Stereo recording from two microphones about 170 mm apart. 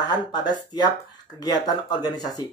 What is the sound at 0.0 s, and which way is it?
Speech, 25° left (ahead or behind).